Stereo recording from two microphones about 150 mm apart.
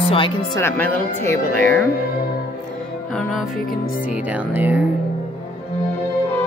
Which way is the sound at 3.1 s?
Centre (ahead or behind).